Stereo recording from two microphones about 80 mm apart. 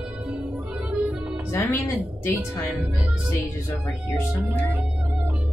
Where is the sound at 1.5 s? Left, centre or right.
Left.